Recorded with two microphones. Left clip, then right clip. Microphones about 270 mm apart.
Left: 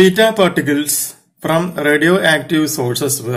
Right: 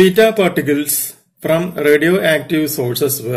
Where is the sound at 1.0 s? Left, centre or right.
Centre.